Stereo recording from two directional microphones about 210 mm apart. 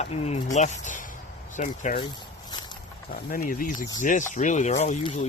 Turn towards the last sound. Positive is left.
turn(degrees=35)  # may be behind; listen again after turning